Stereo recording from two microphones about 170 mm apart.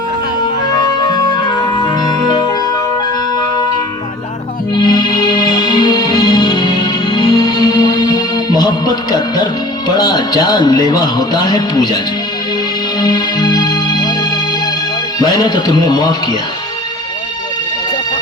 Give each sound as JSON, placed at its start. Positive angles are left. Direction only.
{"t": 0.4, "sound": "music", "side_deg": 25}
{"t": 4.7, "sound": "music", "side_deg": 25}
{"t": 13.0, "sound": "music", "side_deg": 25}
{"t": 15.2, "sound": "a man's voice", "side_deg": 25}